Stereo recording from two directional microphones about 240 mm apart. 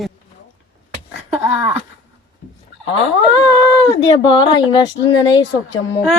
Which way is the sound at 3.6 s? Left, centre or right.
Centre.